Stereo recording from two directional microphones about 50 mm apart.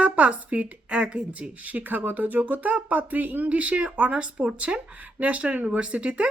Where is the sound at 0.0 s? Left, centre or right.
Right.